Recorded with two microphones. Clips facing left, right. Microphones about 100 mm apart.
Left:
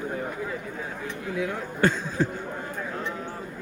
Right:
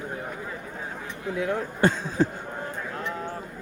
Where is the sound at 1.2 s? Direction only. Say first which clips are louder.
Right 3 dB; 25° right (ahead or behind).